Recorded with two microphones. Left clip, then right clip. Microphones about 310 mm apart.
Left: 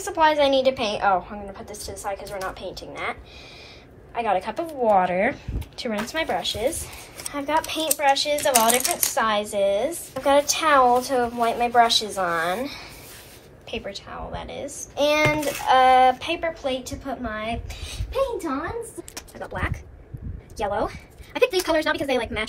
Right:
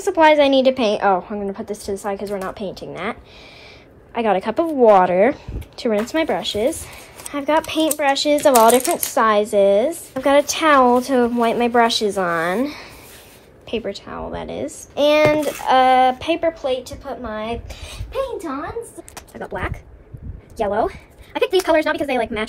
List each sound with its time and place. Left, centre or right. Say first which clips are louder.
0.0 s speech: right 6 dB; right
19.3 s speech: right 3 dB; right